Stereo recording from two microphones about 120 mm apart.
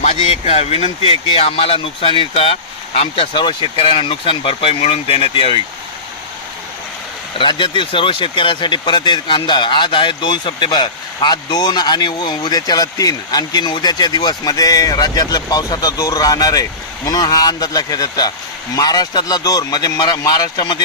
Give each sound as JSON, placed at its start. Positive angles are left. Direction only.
{"t": 0.0, "sound": "speech", "side_deg": 60}
{"t": 7.3, "sound": "speech", "side_deg": 45}